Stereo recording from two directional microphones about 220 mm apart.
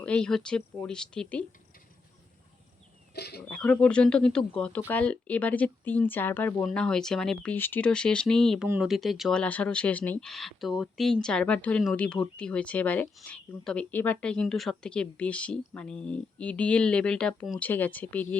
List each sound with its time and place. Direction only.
0.0 s speech: 5° left (ahead or behind)
3.2 s speech: 50° left (ahead or behind)
3.5 s speech: 5° left (ahead or behind)